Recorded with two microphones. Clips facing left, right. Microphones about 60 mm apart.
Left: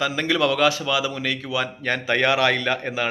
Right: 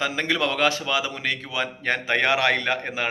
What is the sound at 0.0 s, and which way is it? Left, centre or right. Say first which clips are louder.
A man's voice: left 3 dB; right.